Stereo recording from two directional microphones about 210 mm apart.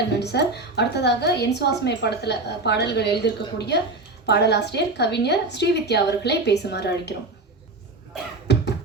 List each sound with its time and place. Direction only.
0.2 s a woman's voice: 55° left (ahead or behind)